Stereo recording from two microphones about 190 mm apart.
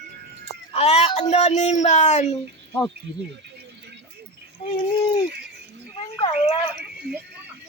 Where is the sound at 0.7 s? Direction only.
35° left (ahead or behind).